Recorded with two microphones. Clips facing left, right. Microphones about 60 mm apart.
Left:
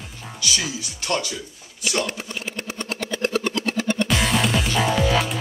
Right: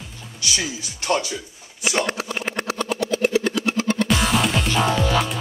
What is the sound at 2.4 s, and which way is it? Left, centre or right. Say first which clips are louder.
Vehicle: right 5 dB; right.